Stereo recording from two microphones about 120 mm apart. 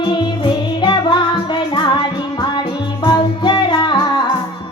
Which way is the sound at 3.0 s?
40° left (ahead or behind).